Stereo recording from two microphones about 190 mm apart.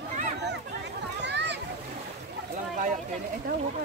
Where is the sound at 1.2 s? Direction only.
65° right (ahead or behind).